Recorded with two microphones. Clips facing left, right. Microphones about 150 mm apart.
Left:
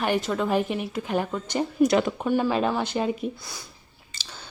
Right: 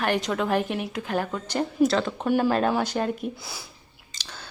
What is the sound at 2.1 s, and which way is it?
Speech, centre (ahead or behind).